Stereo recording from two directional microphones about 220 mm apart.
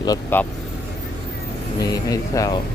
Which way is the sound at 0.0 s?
15° left (ahead or behind).